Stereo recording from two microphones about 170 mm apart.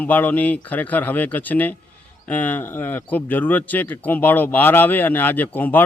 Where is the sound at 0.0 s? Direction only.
10° left (ahead or behind).